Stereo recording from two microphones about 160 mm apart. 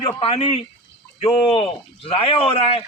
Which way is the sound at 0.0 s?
35° left (ahead or behind).